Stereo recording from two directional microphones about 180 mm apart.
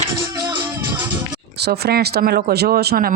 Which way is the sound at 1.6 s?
65° right (ahead or behind).